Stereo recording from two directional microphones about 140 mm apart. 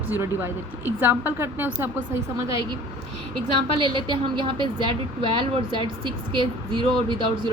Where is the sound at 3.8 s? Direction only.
35° right (ahead or behind).